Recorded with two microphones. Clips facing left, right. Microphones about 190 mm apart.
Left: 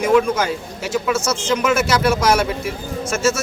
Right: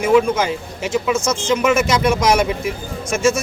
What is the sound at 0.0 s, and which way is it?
A man's voice, 10° right (ahead or behind).